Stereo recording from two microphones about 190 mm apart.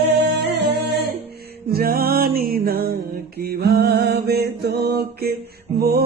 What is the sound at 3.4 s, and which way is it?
Mantra, 55° right (ahead or behind).